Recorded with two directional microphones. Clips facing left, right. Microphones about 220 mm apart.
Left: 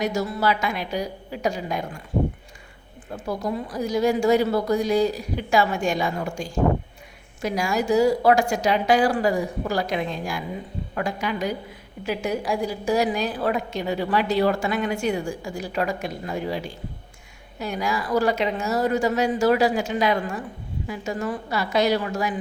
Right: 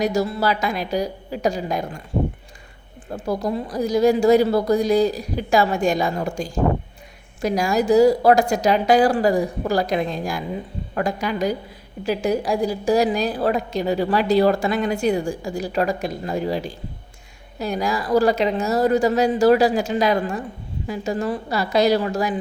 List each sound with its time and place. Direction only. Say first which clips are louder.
0.0 s a woman's voice: right 3 dB; 35° right (ahead or behind)
3.1 s a woman's voice: right 4 dB; 35° right (ahead or behind)